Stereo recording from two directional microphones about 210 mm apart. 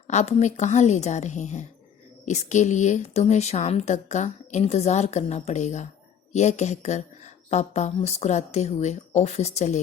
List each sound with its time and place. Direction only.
0.1 s speech: 30° left (ahead or behind)